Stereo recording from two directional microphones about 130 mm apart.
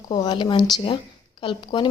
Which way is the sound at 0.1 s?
35° left (ahead or behind).